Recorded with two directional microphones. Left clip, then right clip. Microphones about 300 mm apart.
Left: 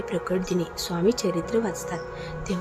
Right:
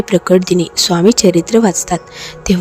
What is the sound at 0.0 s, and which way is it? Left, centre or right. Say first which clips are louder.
Speech: right 16 dB; right.